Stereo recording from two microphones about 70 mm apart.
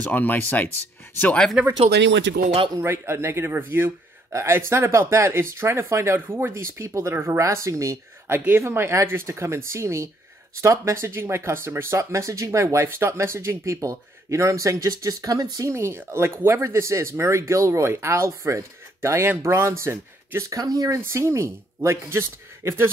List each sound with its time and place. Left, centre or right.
0.0 s speech: left
2.8 s speech: right
15.7 s speech: right
21.0 s speech: right